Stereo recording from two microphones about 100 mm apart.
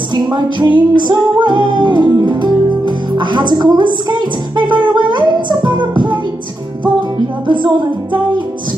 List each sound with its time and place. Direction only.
0.1 s music: 50° right (ahead or behind)
7.4 s music: 55° right (ahead or behind)